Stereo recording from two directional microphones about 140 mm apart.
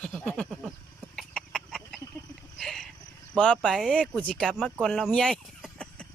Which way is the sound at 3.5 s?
Centre (ahead or behind).